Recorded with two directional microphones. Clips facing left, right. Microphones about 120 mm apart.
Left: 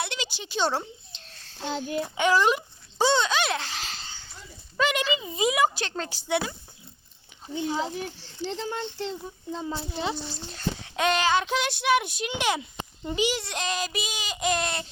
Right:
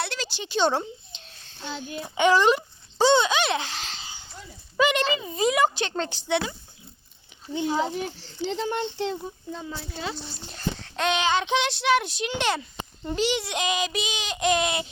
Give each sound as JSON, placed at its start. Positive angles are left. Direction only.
{"t": 0.0, "sound": "a sound", "side_deg": 20}
{"t": 0.5, "sound": "a sound", "side_deg": 5}
{"t": 1.5, "sound": "a child's voice", "side_deg": 90}
{"t": 2.0, "sound": "toothbrush", "side_deg": 0}
{"t": 4.8, "sound": "speech", "side_deg": 0}
{"t": 7.5, "sound": "speech", "side_deg": -75}
{"t": 9.5, "sound": "speech", "side_deg": 25}
{"t": 10.8, "sound": "a child's voice", "side_deg": 10}
{"t": 13.3, "sound": "speech", "side_deg": 0}